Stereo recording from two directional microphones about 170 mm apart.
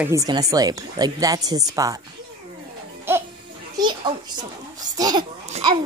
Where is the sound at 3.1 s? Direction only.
15° right (ahead or behind).